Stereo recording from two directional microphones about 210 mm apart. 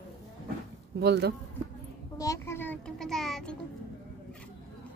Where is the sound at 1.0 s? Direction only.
50° right (ahead or behind).